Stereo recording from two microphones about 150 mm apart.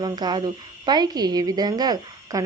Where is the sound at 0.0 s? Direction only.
30° right (ahead or behind).